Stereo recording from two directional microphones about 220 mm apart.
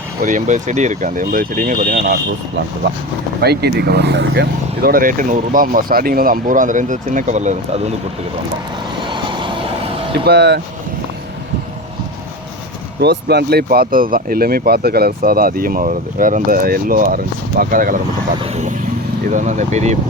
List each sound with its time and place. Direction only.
0.2 s speech: 35° right (ahead or behind)
3.4 s speech: 45° right (ahead or behind)
9.0 s vehicle: 20° right (ahead or behind)
10.2 s speech: 50° right (ahead or behind)
13.0 s speech: 50° right (ahead or behind); by 20.0 s 30° right (ahead or behind)